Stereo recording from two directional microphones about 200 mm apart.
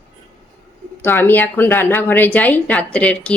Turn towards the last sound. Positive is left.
turn(degrees=5)  # may be behind; listen again after turning